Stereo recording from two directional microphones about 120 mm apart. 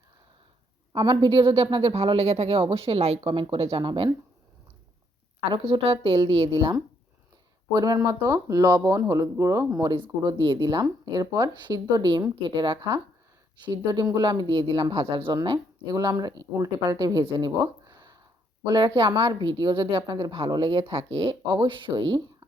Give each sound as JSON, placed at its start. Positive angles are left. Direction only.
{"t": 0.9, "sound": "a woman's voice", "side_deg": -35}
{"t": 5.5, "sound": "a woman's voice", "side_deg": -50}